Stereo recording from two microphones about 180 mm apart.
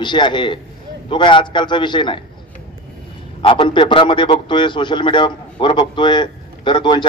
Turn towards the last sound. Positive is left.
turn(degrees=25)  # may be behind; listen again after turning